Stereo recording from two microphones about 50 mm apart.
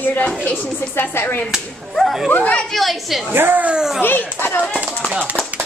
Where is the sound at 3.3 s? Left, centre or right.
Right.